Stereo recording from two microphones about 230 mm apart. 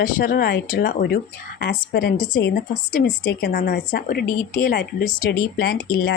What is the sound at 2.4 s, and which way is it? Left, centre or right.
Speech, left.